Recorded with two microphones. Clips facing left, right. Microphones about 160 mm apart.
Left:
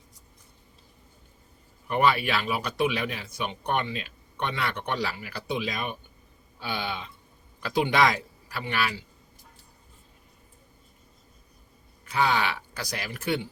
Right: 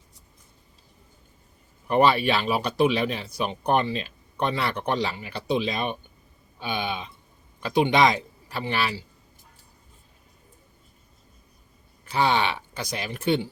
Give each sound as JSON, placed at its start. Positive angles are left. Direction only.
{"t": 1.9, "sound": "speech", "side_deg": -30}
{"t": 4.9, "sound": "a man's voice", "side_deg": -25}
{"t": 12.0, "sound": "a man's voice", "side_deg": -30}